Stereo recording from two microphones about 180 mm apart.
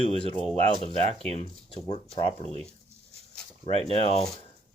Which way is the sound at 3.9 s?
35° left (ahead or behind).